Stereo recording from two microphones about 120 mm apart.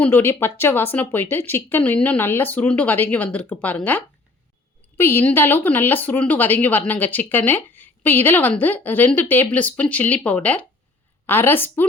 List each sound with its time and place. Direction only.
0.0 s a woman's voice: 20° left (ahead or behind)